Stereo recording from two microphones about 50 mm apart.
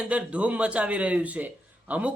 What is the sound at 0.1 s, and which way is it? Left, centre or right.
A man's voice, right.